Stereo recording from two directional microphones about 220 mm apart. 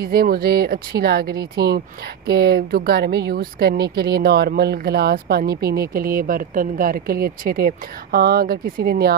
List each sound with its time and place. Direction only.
0.0 s speech: 45° right (ahead or behind)